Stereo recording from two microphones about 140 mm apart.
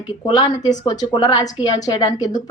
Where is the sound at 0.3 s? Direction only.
30° left (ahead or behind).